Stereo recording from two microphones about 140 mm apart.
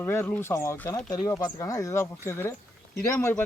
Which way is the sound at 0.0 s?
15° left (ahead or behind).